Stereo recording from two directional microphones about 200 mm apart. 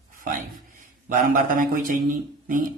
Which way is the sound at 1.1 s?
45° right (ahead or behind).